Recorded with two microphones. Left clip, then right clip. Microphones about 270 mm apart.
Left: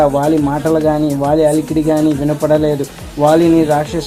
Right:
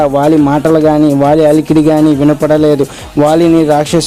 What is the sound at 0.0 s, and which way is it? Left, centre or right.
A man's voice, right.